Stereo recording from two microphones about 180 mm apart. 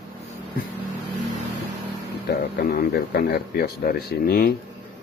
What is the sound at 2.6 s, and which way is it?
Speech, 60° left (ahead or behind).